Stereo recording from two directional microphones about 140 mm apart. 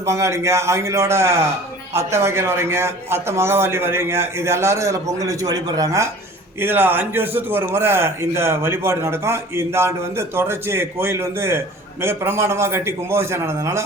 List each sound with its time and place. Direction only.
0.0 s a man's voice: 20° right (ahead or behind)